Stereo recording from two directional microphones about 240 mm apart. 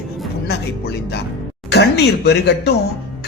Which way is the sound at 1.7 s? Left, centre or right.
Left.